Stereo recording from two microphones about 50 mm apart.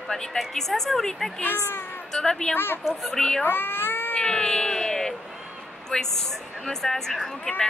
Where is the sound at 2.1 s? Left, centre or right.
Centre.